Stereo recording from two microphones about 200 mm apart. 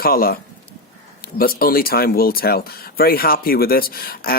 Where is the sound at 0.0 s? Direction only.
45° left (ahead or behind).